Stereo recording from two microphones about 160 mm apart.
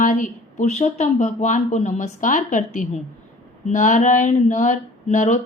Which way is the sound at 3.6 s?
50° left (ahead or behind).